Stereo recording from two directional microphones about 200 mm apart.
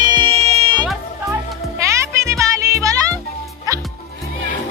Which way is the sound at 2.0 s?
15° right (ahead or behind).